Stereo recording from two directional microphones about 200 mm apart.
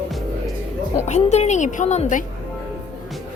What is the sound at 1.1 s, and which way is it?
A woman's voice, 35° left (ahead or behind).